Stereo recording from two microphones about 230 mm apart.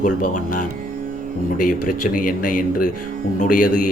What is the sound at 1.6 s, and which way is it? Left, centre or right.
Speech, left.